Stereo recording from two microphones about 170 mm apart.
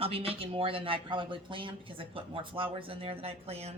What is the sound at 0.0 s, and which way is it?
Speech, 35° right (ahead or behind).